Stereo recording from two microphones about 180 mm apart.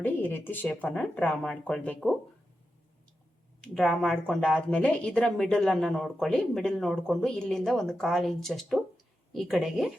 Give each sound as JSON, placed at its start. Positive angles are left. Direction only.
{"t": 0.0, "sound": "speech", "side_deg": 10}
{"t": 3.6, "sound": "speech", "side_deg": 5}